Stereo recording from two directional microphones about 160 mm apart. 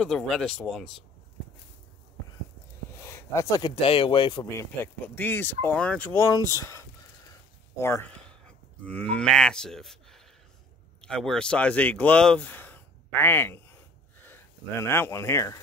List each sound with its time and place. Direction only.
0.0 s speech: centre (ahead or behind)
3.0 s a sound: 15° left (ahead or behind)
3.8 s speech: 35° left (ahead or behind)